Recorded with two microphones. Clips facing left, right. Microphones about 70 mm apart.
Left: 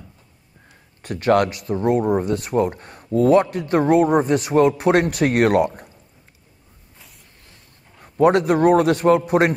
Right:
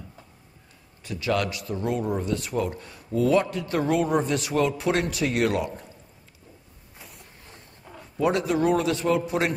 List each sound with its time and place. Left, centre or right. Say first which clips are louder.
1.0 s speech: left 9 dB; left
8.2 s speech: left 8 dB; left